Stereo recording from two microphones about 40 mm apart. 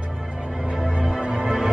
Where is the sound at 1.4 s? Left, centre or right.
Centre.